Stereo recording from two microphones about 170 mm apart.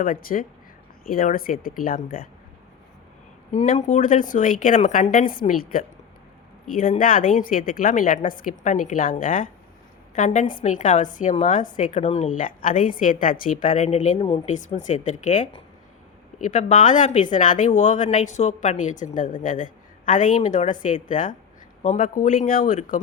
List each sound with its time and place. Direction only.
0.0 s speech: 55° left (ahead or behind)
3.5 s speech: 40° left (ahead or behind)
7.0 s speech: 55° left (ahead or behind)
14.2 s a woman's voice: 30° left (ahead or behind)
14.4 s speech: 45° left (ahead or behind)